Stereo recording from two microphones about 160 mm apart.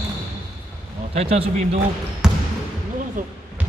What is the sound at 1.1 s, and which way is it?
Speech, 40° right (ahead or behind).